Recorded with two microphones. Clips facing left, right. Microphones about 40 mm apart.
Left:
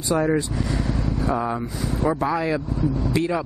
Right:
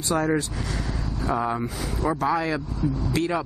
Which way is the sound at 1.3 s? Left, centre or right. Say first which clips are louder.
Right 1 dB; centre.